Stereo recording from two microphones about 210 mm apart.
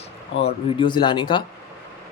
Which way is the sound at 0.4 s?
25° left (ahead or behind).